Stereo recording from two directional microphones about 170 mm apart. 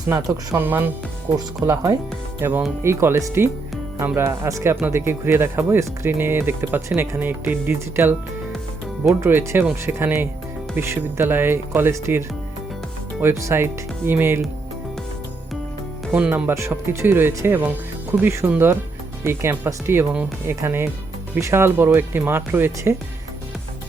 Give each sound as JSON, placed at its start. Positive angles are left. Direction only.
{"t": 0.1, "sound": "speech", "side_deg": -15}
{"t": 16.1, "sound": "speech", "side_deg": -10}